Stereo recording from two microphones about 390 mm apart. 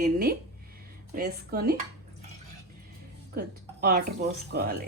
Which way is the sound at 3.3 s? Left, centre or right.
Right.